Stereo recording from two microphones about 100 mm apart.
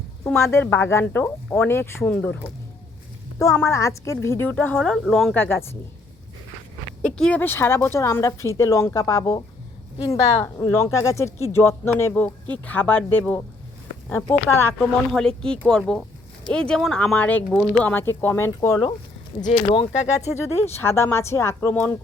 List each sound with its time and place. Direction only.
0.3 s speech: 25° left (ahead or behind)
3.4 s speech: 30° left (ahead or behind); by 5.3 s 5° left (ahead or behind)
5.3 s speech: 20° left (ahead or behind)
7.0 s speech: 10° left (ahead or behind); by 9.4 s 35° left (ahead or behind)
10.0 s speech: 85° left
10.7 s speech: 30° left (ahead or behind)
14.8 s speech: 5° left (ahead or behind)
18.2 s speech: 20° left (ahead or behind)
19.7 s speech: 80° left
20.7 s speech: 25° left (ahead or behind)